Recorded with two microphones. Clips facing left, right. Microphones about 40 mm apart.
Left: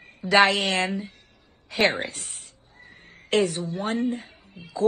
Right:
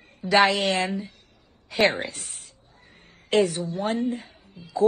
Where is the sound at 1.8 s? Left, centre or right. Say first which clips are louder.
Right 1 dB; left.